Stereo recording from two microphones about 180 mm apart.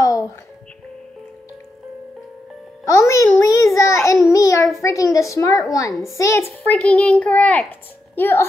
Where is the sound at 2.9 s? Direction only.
15° left (ahead or behind).